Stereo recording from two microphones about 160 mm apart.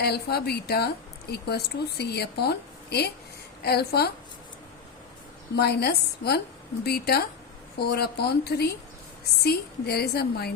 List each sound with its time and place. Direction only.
0.0 s a woman's voice: 90° left
5.5 s a woman's voice: 90° left